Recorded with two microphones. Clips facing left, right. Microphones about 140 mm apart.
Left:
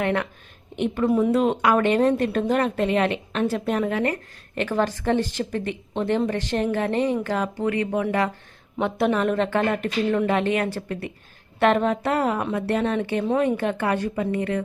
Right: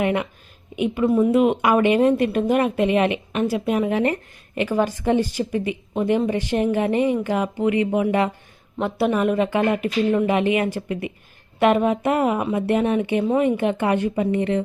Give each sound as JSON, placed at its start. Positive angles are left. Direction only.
{"t": 0.0, "sound": "speech", "side_deg": -15}
{"t": 1.3, "sound": "speech", "side_deg": -15}
{"t": 8.8, "sound": "a woman's voice", "side_deg": 0}